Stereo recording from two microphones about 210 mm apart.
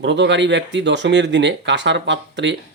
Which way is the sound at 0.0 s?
55° right (ahead or behind).